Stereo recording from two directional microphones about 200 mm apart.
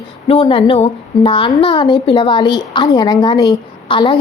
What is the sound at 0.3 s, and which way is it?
A woman's voice, 25° left (ahead or behind).